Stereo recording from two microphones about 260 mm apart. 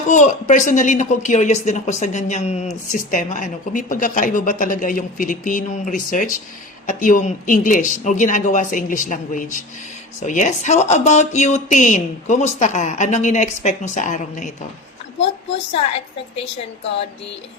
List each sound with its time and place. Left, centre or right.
0.1 s a woman's voice: left
15.9 s a woman's voice: left